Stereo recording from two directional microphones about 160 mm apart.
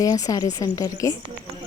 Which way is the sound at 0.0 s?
20° left (ahead or behind).